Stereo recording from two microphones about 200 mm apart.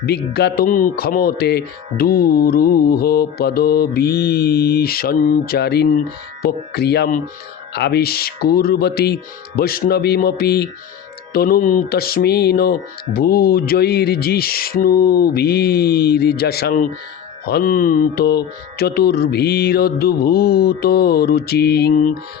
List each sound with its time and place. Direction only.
0.0 s speech: 55° left (ahead or behind)